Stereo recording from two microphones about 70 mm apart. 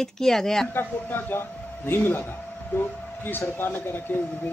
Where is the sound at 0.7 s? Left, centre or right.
Left.